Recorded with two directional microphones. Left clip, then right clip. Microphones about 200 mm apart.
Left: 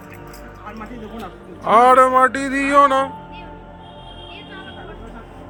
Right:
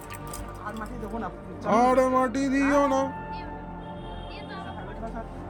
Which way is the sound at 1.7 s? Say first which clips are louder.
Left 10 dB; centre (ahead or behind).